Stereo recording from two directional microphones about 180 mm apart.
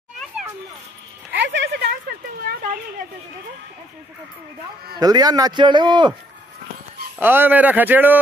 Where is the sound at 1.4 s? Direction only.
90° right.